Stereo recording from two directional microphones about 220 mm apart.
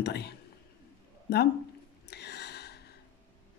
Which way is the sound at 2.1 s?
50° left (ahead or behind).